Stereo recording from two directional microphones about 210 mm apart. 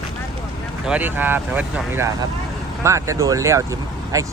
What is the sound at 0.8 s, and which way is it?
Speech, 5° right (ahead or behind).